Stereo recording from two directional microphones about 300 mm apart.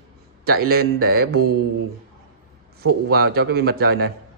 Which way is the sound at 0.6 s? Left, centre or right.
Right.